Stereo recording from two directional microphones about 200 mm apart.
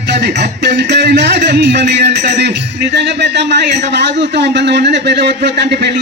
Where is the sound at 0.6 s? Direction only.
60° right (ahead or behind).